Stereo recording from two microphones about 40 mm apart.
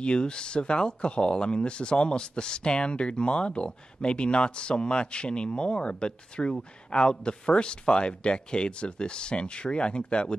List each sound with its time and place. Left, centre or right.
0.0 s speech: left